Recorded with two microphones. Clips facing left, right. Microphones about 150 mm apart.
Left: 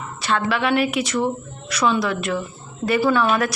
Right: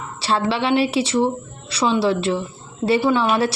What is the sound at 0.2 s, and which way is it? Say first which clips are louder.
A woman's voice: right 1 dB; 30° right (ahead or behind).